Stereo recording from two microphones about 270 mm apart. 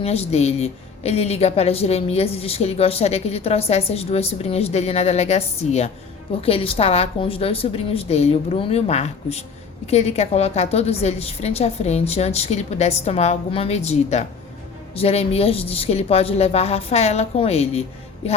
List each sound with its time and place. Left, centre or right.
0.0 s a woman's voice: left